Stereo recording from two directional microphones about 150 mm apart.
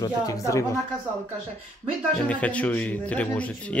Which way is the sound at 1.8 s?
10° left (ahead or behind).